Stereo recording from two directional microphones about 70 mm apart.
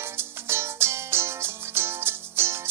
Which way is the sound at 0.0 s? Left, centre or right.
Right.